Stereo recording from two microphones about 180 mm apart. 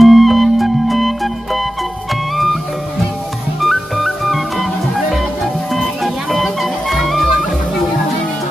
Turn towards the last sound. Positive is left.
turn(degrees=0)  # may be behind; listen again after turning